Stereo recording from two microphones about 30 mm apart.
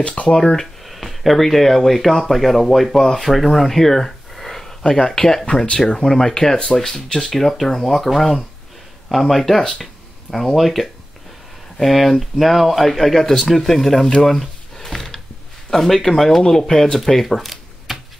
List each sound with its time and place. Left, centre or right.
0.0 s speech: left
0.3 s speech: left
0.8 s speech: centre
9.1 s speech: centre
14.8 s a sound: centre
15.7 s speech: centre